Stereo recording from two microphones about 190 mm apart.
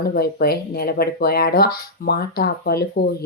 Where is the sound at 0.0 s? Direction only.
55° left (ahead or behind).